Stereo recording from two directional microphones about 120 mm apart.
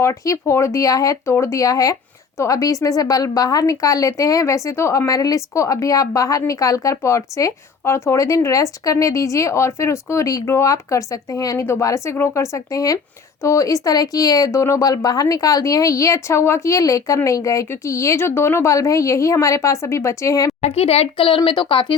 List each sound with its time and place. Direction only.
0.0 s speech: 25° left (ahead or behind)
20.6 s speech: 60° left (ahead or behind)